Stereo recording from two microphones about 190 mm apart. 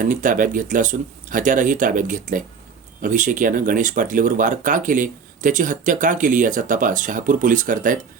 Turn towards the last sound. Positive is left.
turn(degrees=-45)  # may be behind; listen again after turning